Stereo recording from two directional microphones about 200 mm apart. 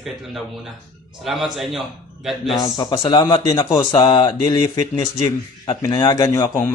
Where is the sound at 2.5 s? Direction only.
20° left (ahead or behind).